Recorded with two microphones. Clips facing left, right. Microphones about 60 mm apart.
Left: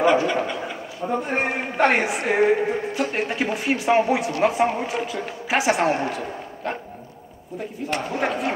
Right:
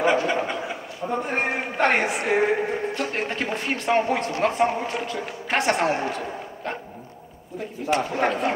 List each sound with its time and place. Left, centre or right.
0.3 s a man's voice: centre
1.0 s a woman's voice: centre
8.1 s a woman's voice: centre